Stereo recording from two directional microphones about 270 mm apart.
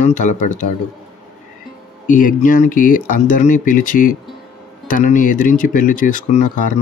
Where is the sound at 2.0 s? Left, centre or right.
Left.